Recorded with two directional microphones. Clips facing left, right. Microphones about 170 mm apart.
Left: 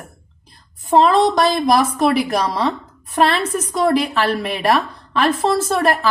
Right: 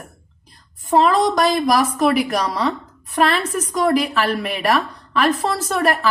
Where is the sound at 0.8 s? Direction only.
25° left (ahead or behind).